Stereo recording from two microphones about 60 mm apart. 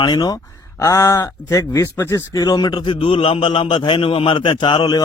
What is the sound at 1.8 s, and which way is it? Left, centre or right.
Speech, left.